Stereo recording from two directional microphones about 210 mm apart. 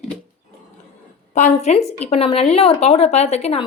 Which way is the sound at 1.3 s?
35° left (ahead or behind).